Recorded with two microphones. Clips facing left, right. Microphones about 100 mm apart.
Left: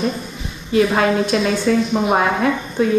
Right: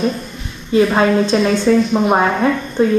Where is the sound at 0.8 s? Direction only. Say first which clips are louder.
Right 3 dB; centre (ahead or behind).